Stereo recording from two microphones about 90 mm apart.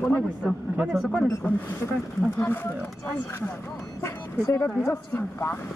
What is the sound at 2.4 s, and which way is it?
Speech, 25° left (ahead or behind).